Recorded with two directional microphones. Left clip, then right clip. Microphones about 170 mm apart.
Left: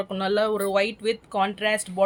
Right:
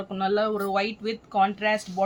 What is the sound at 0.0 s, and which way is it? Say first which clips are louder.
Speech: left 1 dB; 60° left (ahead or behind).